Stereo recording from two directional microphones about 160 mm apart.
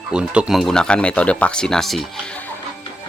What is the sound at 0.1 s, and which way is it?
Speech, 5° right (ahead or behind).